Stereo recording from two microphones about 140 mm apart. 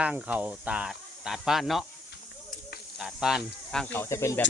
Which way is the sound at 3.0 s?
5° right (ahead or behind).